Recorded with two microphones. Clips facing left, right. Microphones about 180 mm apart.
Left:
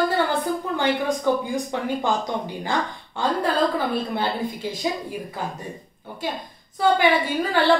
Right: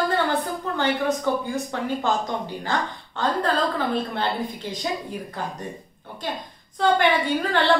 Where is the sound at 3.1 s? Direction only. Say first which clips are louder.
Left 1 dB; 10° left (ahead or behind).